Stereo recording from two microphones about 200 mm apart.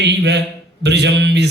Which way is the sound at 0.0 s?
60° right (ahead or behind).